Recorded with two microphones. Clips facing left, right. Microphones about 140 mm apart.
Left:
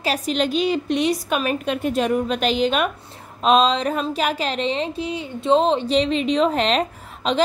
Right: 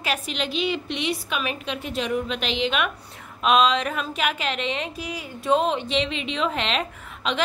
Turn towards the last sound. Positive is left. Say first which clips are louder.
# left 6 dB
turn(degrees=35)  # may be behind; listen again after turning